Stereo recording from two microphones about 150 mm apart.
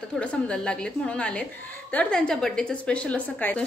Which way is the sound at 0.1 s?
5° left (ahead or behind).